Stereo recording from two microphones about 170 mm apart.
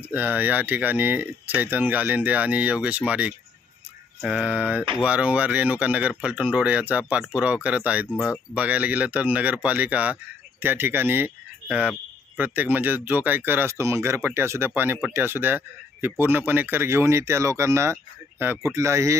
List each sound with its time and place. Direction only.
0.1 s speech: 10° right (ahead or behind)